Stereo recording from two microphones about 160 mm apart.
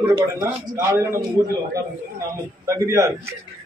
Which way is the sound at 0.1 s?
20° right (ahead or behind).